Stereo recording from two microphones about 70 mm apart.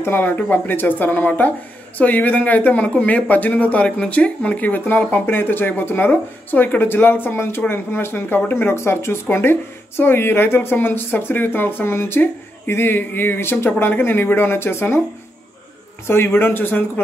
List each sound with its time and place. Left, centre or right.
0.0 s speech: left
16.1 s speech: left